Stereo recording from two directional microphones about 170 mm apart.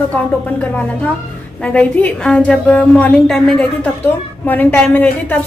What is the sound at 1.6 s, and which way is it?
A woman's voice, 10° left (ahead or behind).